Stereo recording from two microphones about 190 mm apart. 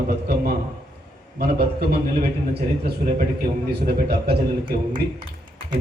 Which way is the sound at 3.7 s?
55° right (ahead or behind).